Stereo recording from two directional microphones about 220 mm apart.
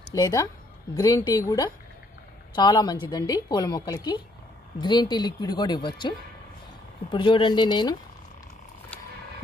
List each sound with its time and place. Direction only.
0.1 s a woman's voice: 15° left (ahead or behind)